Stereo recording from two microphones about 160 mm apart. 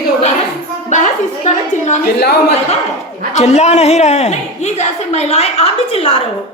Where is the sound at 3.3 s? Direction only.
45° left (ahead or behind).